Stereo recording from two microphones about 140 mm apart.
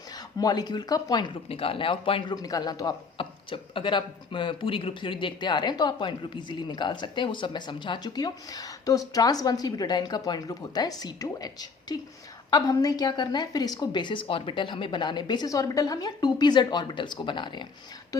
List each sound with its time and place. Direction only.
0.3 s speech: 30° left (ahead or behind)